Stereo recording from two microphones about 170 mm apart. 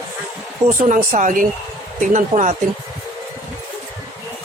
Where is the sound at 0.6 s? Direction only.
45° right (ahead or behind).